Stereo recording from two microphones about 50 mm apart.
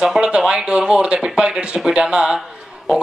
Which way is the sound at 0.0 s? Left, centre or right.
Centre.